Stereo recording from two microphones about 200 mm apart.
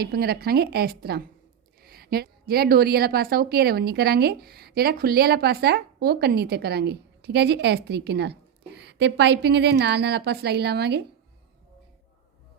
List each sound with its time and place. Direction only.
0.0 s a woman's voice: 50° right (ahead or behind)